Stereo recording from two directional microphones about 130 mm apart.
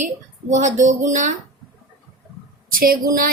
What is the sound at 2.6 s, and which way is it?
Speech, 90° right.